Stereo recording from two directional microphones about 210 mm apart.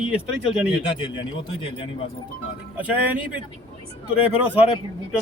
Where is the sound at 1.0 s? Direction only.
25° left (ahead or behind).